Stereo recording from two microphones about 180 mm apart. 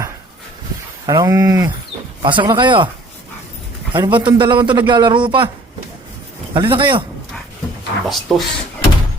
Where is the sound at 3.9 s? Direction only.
25° right (ahead or behind).